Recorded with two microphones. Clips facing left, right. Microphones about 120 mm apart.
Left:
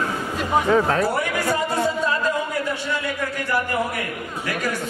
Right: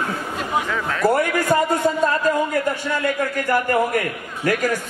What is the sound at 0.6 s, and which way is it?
Speech, 35° left (ahead or behind).